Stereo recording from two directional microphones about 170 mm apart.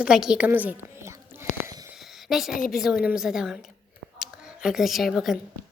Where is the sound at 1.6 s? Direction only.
20° right (ahead or behind).